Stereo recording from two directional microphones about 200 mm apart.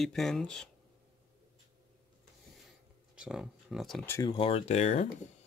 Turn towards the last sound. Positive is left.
turn(degrees=35)  # may be behind; listen again after turning